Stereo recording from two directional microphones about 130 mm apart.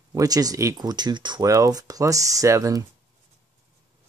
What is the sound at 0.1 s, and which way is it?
Speech, 30° right (ahead or behind).